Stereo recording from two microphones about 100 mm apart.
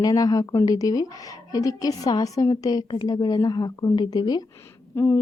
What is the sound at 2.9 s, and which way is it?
A woman's voice, 50° left (ahead or behind).